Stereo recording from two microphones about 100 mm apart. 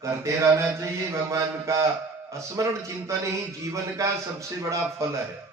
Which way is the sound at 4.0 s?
30° right (ahead or behind).